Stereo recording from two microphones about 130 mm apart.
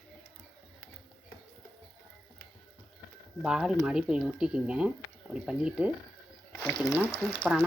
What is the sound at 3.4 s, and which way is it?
Speech, 5° right (ahead or behind).